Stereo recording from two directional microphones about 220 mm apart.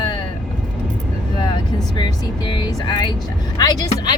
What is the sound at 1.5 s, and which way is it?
Speech, 20° left (ahead or behind).